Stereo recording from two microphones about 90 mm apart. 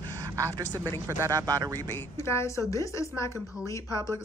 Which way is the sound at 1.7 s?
30° left (ahead or behind).